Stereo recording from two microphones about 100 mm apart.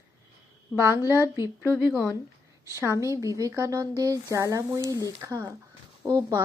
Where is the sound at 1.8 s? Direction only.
5° right (ahead or behind).